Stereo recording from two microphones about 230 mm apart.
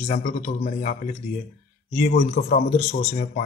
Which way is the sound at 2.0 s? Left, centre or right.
Left.